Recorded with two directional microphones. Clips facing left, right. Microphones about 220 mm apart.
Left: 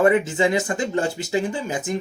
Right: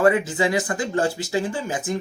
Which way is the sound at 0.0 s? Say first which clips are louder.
Left 1 dB; 25° left (ahead or behind).